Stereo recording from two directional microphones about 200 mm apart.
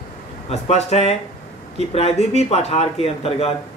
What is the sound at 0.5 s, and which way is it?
Speech, 30° left (ahead or behind).